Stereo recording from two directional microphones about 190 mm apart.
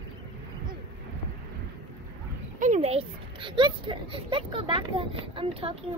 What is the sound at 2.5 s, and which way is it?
A child's voice, 40° right (ahead or behind).